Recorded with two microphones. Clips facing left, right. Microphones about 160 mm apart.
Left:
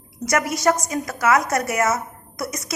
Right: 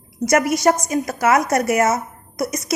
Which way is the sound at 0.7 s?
25° right (ahead or behind).